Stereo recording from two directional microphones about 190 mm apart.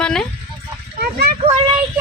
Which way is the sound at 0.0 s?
5° left (ahead or behind).